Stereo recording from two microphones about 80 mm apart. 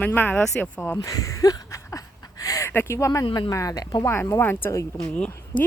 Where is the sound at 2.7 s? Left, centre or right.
Left.